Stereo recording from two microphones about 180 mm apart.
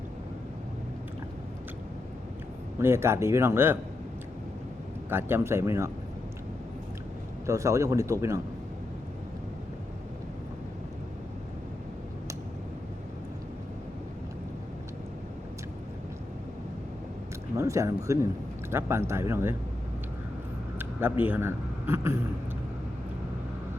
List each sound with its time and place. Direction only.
2.7 s speech: 15° right (ahead or behind)
5.0 s speech: 15° right (ahead or behind)
7.4 s speech: 15° right (ahead or behind)
17.5 s speech: 15° right (ahead or behind)
20.7 s speech: 10° right (ahead or behind)